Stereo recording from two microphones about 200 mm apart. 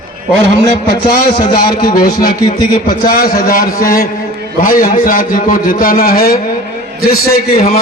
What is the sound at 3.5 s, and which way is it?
Speech, 45° left (ahead or behind).